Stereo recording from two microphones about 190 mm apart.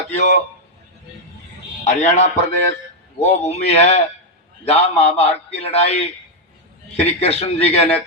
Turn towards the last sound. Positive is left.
turn(degrees=30)  # may be behind; listen again after turning